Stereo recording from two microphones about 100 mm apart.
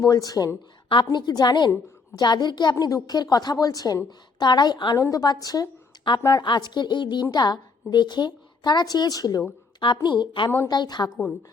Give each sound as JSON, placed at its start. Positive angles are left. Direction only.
{"t": 0.0, "sound": "a woman's voice", "side_deg": 35}
{"t": 6.1, "sound": "a woman's voice", "side_deg": 50}
{"t": 9.8, "sound": "a woman's voice", "side_deg": 50}